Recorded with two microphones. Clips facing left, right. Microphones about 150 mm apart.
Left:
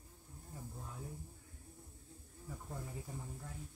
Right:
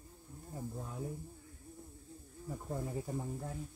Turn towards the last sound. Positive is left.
turn(degrees=-50)  # may be behind; listen again after turning